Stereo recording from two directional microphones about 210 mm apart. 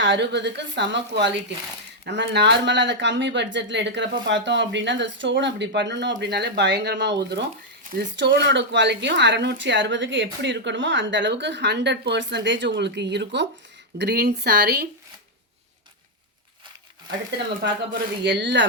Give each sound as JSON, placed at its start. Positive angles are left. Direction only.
{"t": 0.0, "sound": "a woman's voice", "side_deg": -55}
{"t": 17.1, "sound": "a woman's voice", "side_deg": -55}